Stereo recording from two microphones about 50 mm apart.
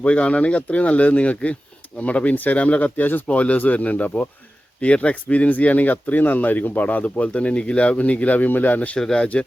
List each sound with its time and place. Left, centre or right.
0.0 s speech: left
9.0 s speech: centre